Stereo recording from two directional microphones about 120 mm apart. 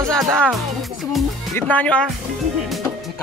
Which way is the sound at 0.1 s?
5° left (ahead or behind).